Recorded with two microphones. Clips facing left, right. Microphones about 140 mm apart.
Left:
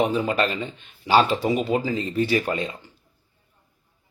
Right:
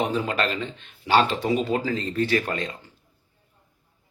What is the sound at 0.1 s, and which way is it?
A man's voice, 5° left (ahead or behind).